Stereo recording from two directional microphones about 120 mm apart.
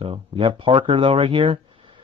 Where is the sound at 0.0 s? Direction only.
55° right (ahead or behind).